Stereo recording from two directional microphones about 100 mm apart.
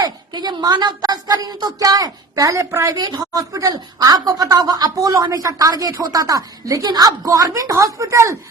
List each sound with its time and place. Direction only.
0.0 s a woman's voice: 45° right (ahead or behind)